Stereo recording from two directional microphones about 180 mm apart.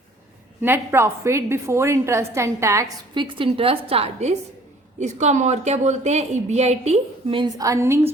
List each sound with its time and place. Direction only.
0.6 s a woman's voice: 10° right (ahead or behind)